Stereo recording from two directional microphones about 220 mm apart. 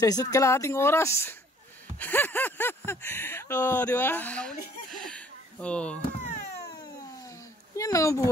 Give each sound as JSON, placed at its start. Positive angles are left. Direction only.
{"t": 0.0, "sound": "speech", "side_deg": 15}
{"t": 7.7, "sound": "speech", "side_deg": 15}